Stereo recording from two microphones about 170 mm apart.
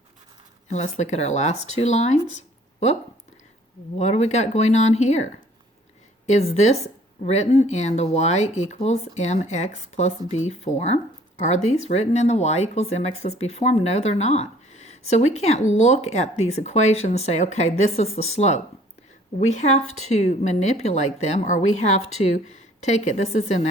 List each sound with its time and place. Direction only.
0.7 s speech: 40° left (ahead or behind)
3.9 s speech: 40° left (ahead or behind)